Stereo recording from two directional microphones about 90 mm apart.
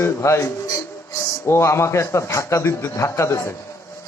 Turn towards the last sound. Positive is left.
turn(degrees=30)  # may be behind; listen again after turning